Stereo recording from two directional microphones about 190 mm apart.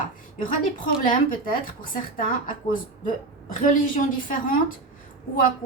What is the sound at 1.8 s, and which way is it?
A woman's voice, 45° left (ahead or behind).